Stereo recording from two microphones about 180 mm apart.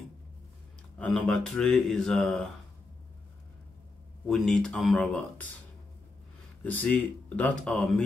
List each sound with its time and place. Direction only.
0.9 s speech: 5° left (ahead or behind)
4.3 s speech: 5° left (ahead or behind)
6.6 s speech: 10° left (ahead or behind)